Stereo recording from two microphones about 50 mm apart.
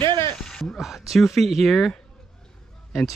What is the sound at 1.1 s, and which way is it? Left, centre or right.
Speech, centre.